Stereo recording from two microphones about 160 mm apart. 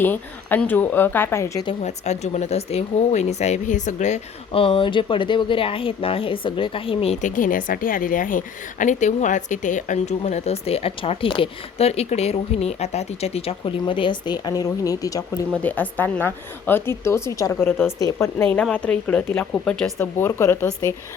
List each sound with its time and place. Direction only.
0.0 s a woman's voice: 10° left (ahead or behind)
1.8 s speech: 45° left (ahead or behind); by 15.2 s 20° left (ahead or behind)
15.5 s a woman's voice: 10° left (ahead or behind)